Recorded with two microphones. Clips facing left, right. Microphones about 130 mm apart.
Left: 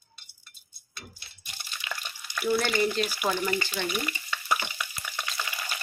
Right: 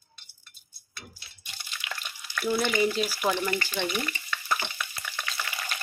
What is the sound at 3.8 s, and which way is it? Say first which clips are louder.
Stir: right 1 dB; 10° left (ahead or behind).